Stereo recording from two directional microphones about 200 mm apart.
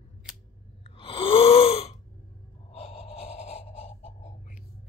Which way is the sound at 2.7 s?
30° left (ahead or behind).